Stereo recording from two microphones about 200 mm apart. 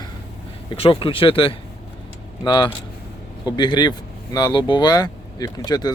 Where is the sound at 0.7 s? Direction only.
25° left (ahead or behind).